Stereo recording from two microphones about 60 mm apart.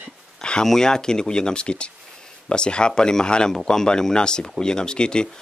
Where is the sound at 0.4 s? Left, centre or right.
Centre.